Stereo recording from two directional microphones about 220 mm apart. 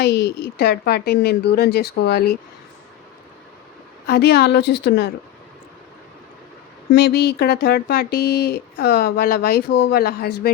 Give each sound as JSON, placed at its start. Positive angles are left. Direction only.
{"t": 0.0, "sound": "speech", "side_deg": 50}
{"t": 4.0, "sound": "speech", "side_deg": 45}
{"t": 6.9, "sound": "speech", "side_deg": 50}